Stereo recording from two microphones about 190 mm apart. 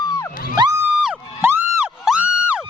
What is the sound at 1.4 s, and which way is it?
Music, 10° right (ahead or behind).